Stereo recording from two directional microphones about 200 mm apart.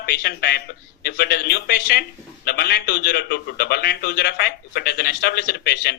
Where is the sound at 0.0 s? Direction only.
50° left (ahead or behind).